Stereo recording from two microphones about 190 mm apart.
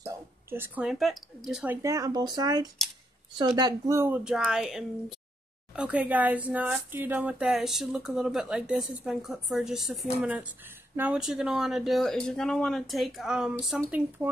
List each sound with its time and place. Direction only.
0.0 s speech: 10° right (ahead or behind)
1.8 s a woman's voice: 15° right (ahead or behind)